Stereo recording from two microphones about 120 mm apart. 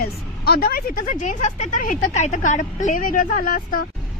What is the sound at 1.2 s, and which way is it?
Speech, 90° left.